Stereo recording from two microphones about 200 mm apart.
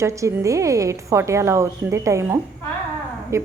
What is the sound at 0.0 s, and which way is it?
A woman's voice, 15° right (ahead or behind).